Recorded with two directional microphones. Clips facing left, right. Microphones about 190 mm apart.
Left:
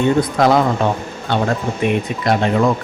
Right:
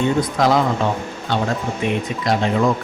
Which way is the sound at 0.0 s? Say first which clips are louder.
Left 3 dB; 60° left (ahead or behind).